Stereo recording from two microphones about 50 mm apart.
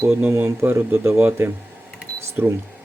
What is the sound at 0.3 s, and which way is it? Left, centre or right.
Speech, right.